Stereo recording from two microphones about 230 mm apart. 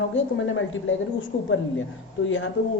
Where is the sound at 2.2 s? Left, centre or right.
Left.